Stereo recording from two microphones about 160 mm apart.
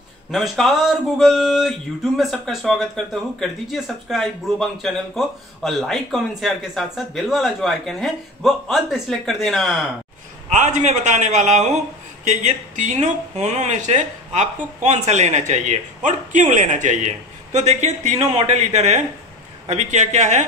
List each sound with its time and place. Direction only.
0.3 s speech: centre (ahead or behind)
10.6 s speech: 50° right (ahead or behind)